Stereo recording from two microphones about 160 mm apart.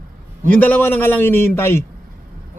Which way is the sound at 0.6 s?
10° left (ahead or behind).